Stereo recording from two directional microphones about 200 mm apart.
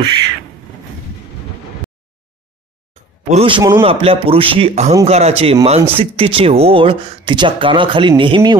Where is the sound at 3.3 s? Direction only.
30° right (ahead or behind).